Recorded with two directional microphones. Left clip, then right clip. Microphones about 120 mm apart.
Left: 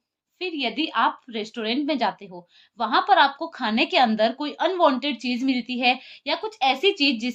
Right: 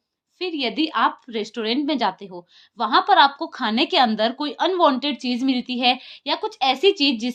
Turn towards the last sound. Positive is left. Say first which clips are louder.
# right 3 dB
turn(degrees=-45)  # may be behind; listen again after turning